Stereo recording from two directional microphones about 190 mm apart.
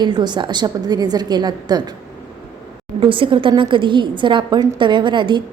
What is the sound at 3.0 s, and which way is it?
A woman's voice, 25° right (ahead or behind).